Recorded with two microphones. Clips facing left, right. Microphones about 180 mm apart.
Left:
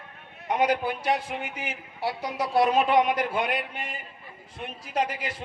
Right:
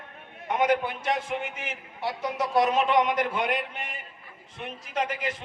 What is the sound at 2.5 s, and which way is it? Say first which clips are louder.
Speech: left 2 dB; 35° left (ahead or behind).